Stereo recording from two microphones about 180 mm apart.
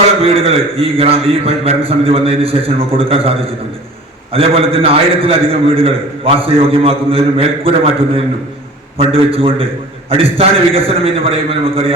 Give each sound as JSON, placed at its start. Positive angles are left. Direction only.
{"t": 0.2, "sound": "a man's voice", "side_deg": -30}